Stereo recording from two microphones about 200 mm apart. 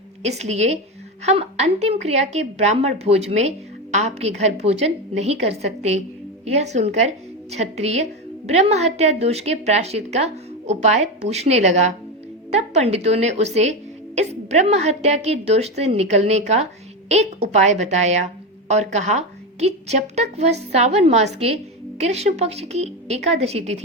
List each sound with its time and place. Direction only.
0.2 s a woman's voice: 35° right (ahead or behind)